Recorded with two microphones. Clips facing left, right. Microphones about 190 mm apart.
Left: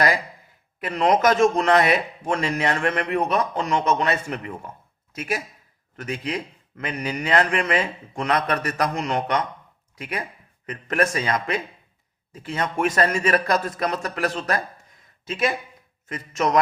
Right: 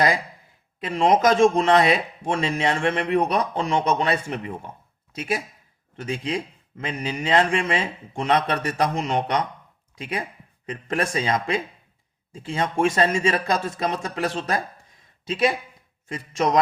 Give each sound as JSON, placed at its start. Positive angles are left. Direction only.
{"t": 0.8, "sound": "a man's voice", "side_deg": -25}
{"t": 16.0, "sound": "a man's voice", "side_deg": -30}